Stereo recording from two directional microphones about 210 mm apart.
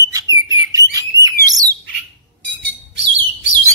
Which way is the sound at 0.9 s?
15° right (ahead or behind).